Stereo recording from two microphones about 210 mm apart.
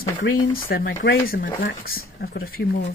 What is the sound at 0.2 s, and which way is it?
Speech, 70° left (ahead or behind).